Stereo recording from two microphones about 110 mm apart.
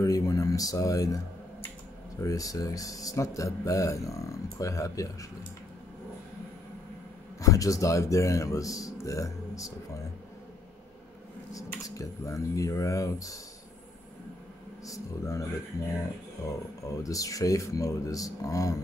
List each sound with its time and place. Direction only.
0.0 s a sound: 30° left (ahead or behind)
2.2 s a man's voice: 30° left (ahead or behind)
7.4 s speech: 30° left (ahead or behind)
11.5 s a man's voice: 30° left (ahead or behind)
14.9 s a man's voice: 30° left (ahead or behind)
16.4 s a man's voice: 30° left (ahead or behind)